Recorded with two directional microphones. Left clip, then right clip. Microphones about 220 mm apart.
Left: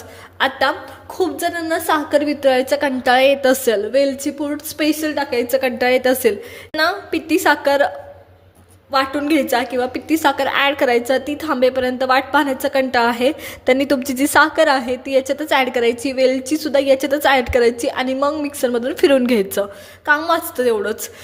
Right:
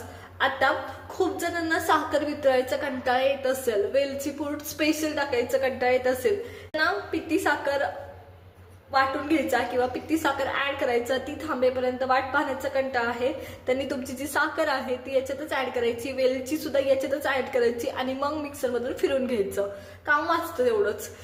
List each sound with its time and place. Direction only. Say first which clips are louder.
0.3 s a woman's voice: left 6 dB; 40° left (ahead or behind)
8.9 s a woman's voice: left 6 dB; 50° left (ahead or behind)